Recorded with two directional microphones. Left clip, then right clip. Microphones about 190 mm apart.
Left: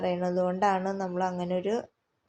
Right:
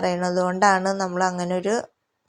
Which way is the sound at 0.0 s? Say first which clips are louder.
Right 5 dB; 25° right (ahead or behind).